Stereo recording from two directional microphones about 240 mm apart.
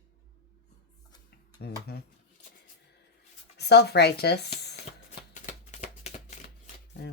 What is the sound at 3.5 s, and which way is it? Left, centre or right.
Speech, left.